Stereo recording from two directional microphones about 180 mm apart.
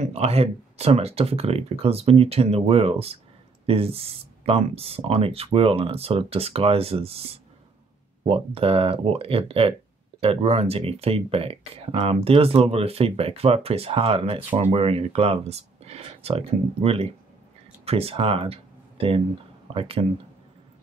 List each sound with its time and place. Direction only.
0.0 s speech: 35° right (ahead or behind)